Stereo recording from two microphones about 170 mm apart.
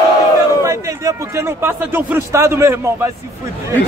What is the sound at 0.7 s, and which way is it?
Speech, 20° right (ahead or behind).